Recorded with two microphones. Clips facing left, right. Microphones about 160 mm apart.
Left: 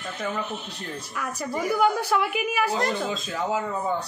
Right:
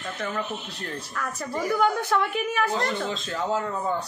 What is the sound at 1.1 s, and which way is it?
Speech, 10° left (ahead or behind).